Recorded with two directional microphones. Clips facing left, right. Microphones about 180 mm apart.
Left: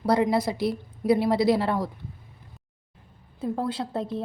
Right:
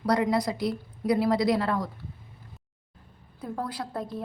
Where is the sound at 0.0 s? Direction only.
30° left (ahead or behind).